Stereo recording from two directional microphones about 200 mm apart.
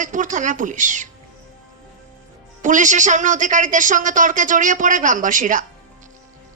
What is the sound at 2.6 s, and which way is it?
A man's voice, 40° right (ahead or behind).